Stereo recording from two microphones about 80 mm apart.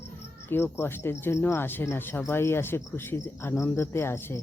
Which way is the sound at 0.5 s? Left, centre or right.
Left.